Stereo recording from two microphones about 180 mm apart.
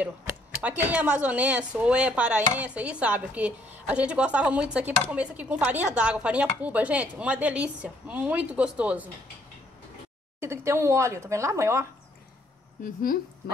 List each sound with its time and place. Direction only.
0.0 s speech: 10° right (ahead or behind)
10.4 s speech: 15° right (ahead or behind)
12.8 s speech: 50° left (ahead or behind)